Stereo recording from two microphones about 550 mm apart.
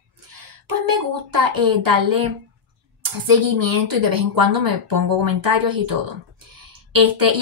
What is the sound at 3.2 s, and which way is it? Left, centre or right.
Speech, right.